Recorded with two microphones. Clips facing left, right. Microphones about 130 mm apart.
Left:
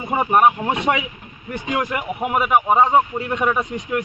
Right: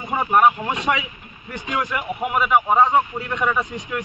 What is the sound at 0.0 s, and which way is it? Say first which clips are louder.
Speech: left 1 dB; 20° left (ahead or behind).